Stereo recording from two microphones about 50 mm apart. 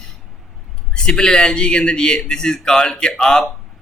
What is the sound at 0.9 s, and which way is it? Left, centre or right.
A man's voice, centre.